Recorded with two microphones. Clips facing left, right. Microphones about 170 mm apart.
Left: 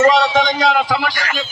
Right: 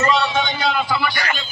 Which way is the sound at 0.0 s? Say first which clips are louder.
Left 6 dB; 90° left.